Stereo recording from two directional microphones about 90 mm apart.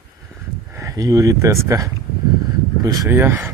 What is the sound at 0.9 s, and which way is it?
Speech, 40° right (ahead or behind).